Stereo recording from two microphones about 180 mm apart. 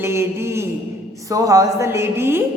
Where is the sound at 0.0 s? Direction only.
15° right (ahead or behind).